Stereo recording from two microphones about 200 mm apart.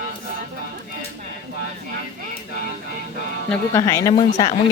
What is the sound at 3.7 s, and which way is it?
Speech, 15° left (ahead or behind).